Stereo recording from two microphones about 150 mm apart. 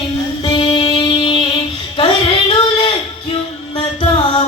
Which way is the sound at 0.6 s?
40° left (ahead or behind).